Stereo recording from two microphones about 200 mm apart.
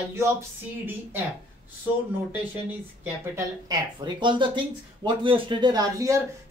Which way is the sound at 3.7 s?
20° right (ahead or behind).